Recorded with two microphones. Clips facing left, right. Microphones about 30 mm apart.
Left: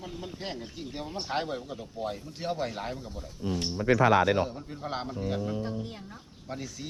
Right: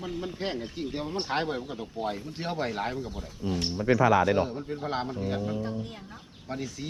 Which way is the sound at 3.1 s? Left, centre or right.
Right.